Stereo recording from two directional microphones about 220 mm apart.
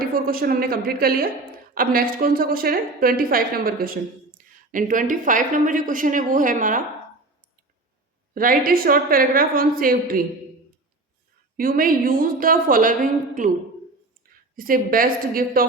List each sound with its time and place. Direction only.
0.0 s a woman's voice: 40° right (ahead or behind)
8.4 s a woman's voice: 40° right (ahead or behind)
11.5 s a woman's voice: 40° right (ahead or behind)
14.5 s a woman's voice: 40° right (ahead or behind)